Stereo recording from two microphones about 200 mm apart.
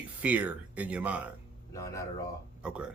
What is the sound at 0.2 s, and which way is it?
Speech, 10° right (ahead or behind).